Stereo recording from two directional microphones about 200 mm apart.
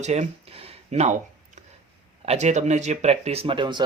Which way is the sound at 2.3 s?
35° right (ahead or behind).